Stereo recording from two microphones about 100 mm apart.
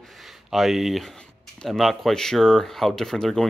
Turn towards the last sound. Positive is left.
turn(degrees=5)  # may be behind; listen again after turning